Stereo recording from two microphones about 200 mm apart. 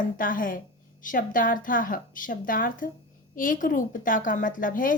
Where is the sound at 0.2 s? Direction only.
45° left (ahead or behind).